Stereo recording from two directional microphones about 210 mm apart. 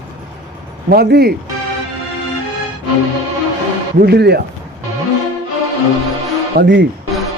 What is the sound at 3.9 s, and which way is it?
Speech, 50° right (ahead or behind).